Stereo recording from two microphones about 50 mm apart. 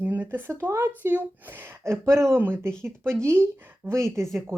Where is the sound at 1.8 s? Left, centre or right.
Right.